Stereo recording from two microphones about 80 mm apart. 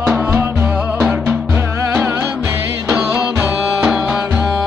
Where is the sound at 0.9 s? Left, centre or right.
Centre.